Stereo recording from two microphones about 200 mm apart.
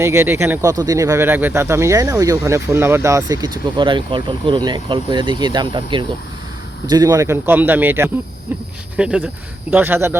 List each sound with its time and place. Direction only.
0.0 s speech: 15° right (ahead or behind)